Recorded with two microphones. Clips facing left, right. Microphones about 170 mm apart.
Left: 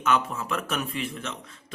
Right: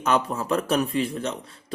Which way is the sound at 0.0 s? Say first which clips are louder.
Right 2 dB; 35° right (ahead or behind).